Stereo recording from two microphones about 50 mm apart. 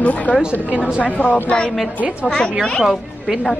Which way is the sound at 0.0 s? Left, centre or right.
Left.